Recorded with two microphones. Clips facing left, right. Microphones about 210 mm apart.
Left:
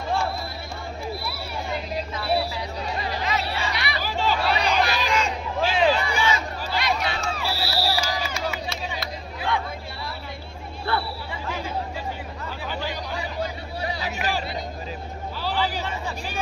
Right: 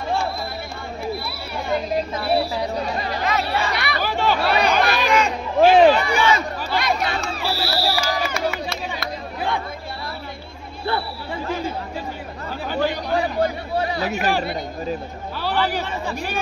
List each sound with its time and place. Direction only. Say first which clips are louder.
2.0 s chatter: right 1 dB; 45° right (ahead or behind)
5.9 s crowd: right 6 dB; 65° right (ahead or behind)
6.7 s crowd: right 3 dB; 50° right (ahead or behind)
12.6 s a sound: right 9 dB; 55° right (ahead or behind)